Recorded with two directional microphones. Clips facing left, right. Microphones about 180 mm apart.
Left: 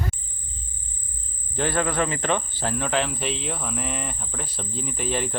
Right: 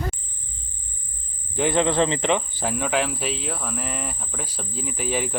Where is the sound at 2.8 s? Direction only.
5° right (ahead or behind).